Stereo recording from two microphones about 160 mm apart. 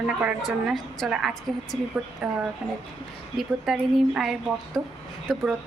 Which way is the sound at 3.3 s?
Centre (ahead or behind).